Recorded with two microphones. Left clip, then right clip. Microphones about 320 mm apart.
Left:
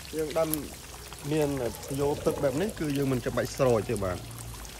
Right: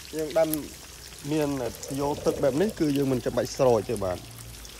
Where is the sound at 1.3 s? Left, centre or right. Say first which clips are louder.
Right 1 dB; right.